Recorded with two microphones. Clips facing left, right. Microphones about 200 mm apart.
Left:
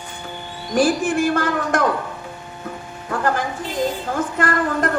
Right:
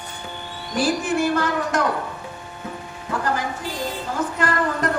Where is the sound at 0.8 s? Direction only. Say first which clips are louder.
Left 3 dB; 50° left (ahead or behind).